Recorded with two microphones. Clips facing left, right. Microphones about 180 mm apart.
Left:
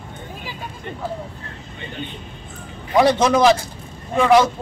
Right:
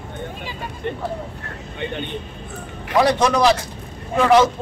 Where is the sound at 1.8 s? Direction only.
65° right (ahead or behind).